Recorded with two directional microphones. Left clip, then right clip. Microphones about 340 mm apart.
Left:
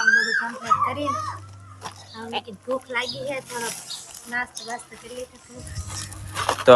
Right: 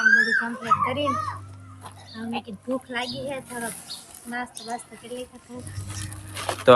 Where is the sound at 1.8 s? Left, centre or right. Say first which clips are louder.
Left 2 dB; left.